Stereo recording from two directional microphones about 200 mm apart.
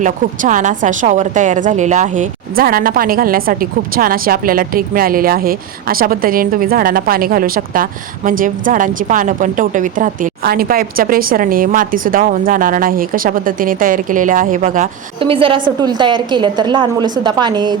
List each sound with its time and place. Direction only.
0.0 s a woman's voice: 40° right (ahead or behind)
15.2 s a woman's voice: 25° right (ahead or behind)